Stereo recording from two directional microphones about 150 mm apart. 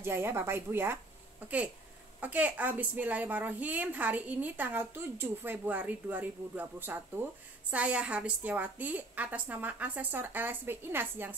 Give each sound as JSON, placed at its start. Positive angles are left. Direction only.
{"t": 0.0, "sound": "speech", "side_deg": -15}